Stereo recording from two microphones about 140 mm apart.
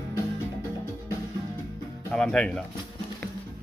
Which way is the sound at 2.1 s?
5° left (ahead or behind).